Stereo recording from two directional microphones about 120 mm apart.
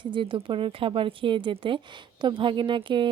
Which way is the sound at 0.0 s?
40° right (ahead or behind).